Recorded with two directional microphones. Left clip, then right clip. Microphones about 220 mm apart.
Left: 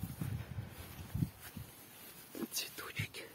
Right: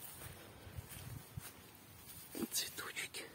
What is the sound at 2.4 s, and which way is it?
Whispering, 5° left (ahead or behind).